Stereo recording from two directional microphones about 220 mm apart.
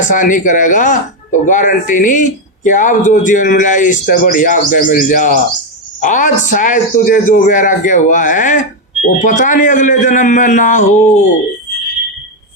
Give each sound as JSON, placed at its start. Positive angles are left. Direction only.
{"t": 0.1, "sound": "speech", "side_deg": 35}